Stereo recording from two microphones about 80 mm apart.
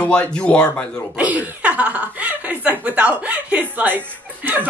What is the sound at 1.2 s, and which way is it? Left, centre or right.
Speech, centre.